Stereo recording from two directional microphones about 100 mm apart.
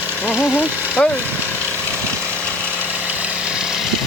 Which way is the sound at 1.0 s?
10° left (ahead or behind).